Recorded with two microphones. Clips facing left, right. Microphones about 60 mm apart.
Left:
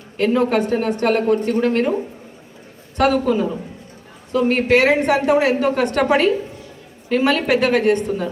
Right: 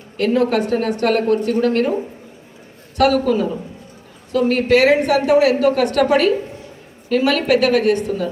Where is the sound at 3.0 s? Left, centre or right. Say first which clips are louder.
Right 1 dB; centre.